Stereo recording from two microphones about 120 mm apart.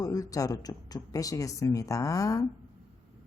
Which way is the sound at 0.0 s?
30° left (ahead or behind).